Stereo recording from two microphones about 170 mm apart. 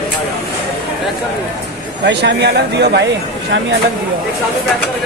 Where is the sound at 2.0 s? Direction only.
90° right.